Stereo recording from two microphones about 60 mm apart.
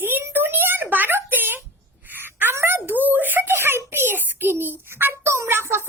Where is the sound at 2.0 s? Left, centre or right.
Right.